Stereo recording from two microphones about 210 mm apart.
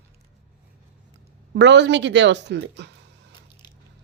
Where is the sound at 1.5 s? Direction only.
55° right (ahead or behind).